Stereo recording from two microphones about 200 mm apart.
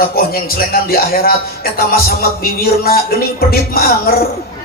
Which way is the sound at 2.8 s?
50° left (ahead or behind).